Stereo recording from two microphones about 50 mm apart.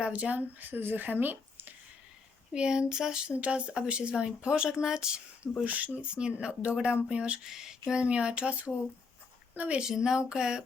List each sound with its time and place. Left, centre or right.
0.0 s speech: right
0.7 s speech: right
2.5 s speech: centre
3.3 s speech: right
5.6 s speech: right
7.4 s speech: centre; by 9.8 s right
9.8 s speech: centre